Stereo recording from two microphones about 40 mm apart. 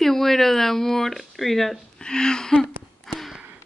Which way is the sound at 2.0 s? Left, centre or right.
Centre.